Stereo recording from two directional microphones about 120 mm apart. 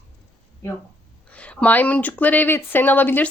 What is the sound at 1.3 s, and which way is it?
Speech, 10° left (ahead or behind).